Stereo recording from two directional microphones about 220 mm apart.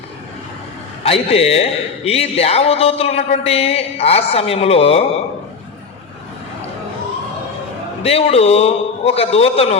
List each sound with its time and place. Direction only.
1.0 s a man's voice: 25° left (ahead or behind)
8.0 s a man's voice: 25° left (ahead or behind)